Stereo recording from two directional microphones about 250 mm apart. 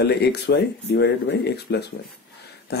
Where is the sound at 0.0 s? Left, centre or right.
Left.